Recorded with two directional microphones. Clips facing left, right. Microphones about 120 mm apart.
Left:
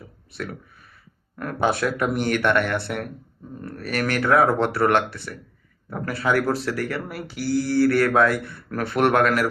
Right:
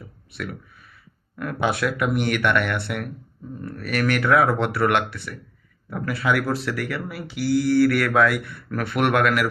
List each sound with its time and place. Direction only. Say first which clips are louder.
1.4 s speech: left 1 dB; 40° left (ahead or behind)